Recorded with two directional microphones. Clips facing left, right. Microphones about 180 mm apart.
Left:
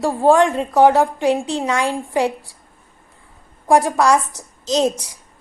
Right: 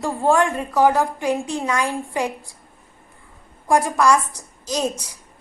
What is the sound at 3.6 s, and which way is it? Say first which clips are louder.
Speech: left 3 dB; 15° left (ahead or behind).